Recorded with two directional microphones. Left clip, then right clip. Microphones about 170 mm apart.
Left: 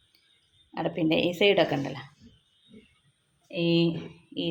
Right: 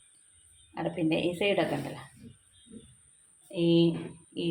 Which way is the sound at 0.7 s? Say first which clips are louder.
Left 4 dB; 40° left (ahead or behind).